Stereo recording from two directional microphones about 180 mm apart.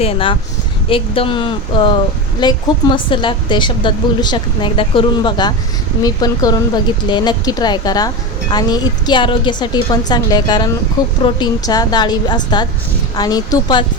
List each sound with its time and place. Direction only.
0.0 s a woman's voice: 30° left (ahead or behind)